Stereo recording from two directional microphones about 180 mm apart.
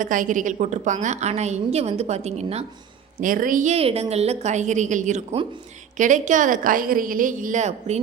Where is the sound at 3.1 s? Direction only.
50° right (ahead or behind).